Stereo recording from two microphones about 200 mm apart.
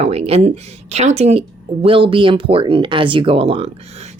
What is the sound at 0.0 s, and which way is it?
A woman's voice, 30° right (ahead or behind).